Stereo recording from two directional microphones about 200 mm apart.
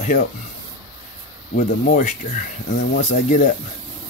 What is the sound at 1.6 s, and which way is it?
Speech, 35° left (ahead or behind).